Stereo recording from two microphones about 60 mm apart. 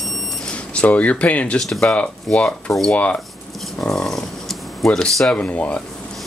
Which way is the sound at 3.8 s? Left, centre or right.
Centre.